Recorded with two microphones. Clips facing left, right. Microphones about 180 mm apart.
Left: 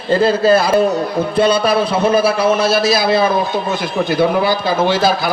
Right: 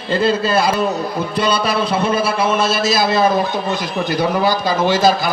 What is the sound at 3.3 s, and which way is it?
A man's voice, 50° left (ahead or behind).